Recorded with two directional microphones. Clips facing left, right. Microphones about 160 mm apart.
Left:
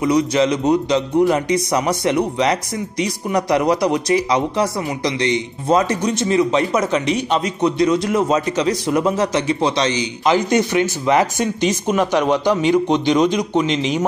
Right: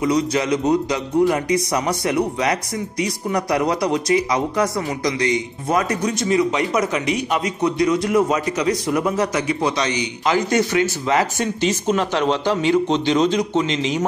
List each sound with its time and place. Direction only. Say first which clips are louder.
0.0 s speech: left 3 dB; 20° left (ahead or behind)